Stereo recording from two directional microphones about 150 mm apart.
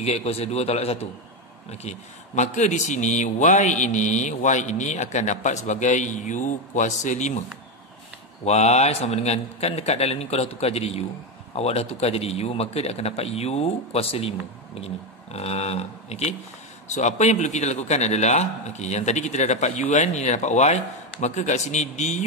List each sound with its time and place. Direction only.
0.0 s a man's voice: 45° left (ahead or behind)
8.5 s a man's voice: 45° left (ahead or behind)
15.3 s a man's voice: 45° left (ahead or behind)